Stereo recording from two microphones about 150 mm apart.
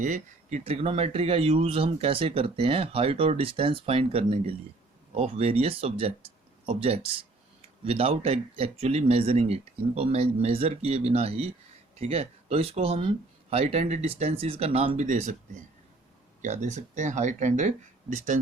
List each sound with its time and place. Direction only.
0.0 s speech: 60° right (ahead or behind)
0.6 s speech: 40° right (ahead or behind)
7.9 s speech: 40° right (ahead or behind)
15.0 s speech: 60° right (ahead or behind)
16.4 s speech: 50° right (ahead or behind)